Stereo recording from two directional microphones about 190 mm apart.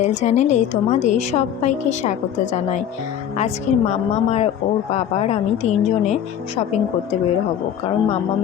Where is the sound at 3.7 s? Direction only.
40° left (ahead or behind).